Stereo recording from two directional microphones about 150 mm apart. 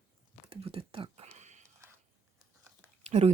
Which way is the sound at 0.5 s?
40° right (ahead or behind).